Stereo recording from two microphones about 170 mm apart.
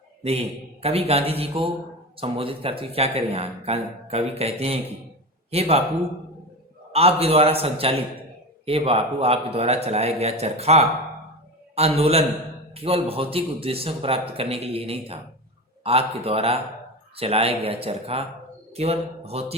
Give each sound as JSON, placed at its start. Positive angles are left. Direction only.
{"t": 0.2, "sound": "speech", "side_deg": -35}
{"t": 6.9, "sound": "speech", "side_deg": -35}